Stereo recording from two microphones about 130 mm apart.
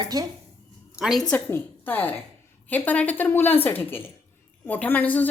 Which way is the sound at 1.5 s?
15° left (ahead or behind).